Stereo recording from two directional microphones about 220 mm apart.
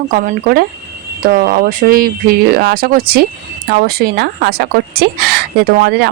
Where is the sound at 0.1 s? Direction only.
40° right (ahead or behind).